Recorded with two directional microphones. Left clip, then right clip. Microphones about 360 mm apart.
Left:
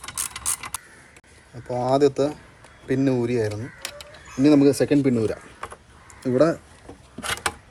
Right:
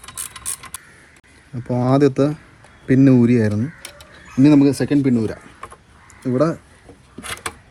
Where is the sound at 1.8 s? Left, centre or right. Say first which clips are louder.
Right 3 dB; centre.